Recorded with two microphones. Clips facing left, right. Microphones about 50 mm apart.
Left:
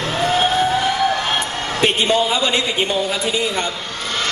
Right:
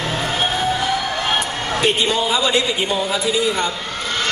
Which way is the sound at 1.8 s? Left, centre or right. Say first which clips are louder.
Left 2 dB; left.